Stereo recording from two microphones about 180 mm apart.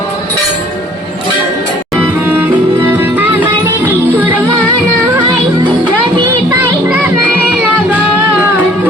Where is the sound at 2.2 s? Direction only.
10° right (ahead or behind).